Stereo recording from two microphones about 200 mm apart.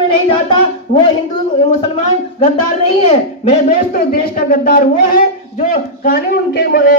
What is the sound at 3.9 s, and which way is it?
Speech, 45° left (ahead or behind).